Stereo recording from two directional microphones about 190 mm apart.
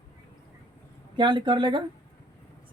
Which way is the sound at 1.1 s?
25° right (ahead or behind).